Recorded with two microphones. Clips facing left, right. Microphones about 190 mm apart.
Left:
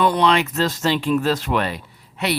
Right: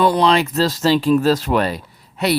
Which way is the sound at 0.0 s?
35° right (ahead or behind).